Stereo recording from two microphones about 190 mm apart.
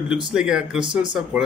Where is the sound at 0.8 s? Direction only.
25° right (ahead or behind).